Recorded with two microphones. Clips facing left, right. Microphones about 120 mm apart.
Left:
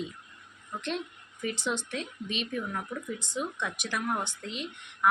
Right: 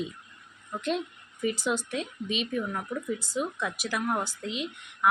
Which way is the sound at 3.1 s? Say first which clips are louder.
Right 3 dB; 40° right (ahead or behind).